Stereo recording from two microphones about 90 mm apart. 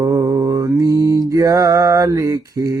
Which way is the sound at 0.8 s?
45° right (ahead or behind).